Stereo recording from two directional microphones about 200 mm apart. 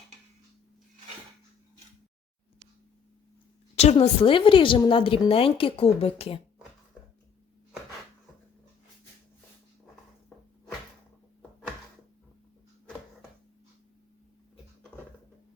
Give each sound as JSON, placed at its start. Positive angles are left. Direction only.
{"t": 3.8, "sound": "a woman's voice", "side_deg": 30}